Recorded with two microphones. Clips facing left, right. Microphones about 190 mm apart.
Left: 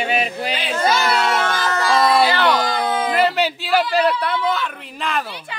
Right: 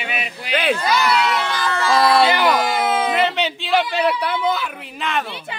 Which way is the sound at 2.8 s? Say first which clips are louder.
Right 1 dB; 25° right (ahead or behind).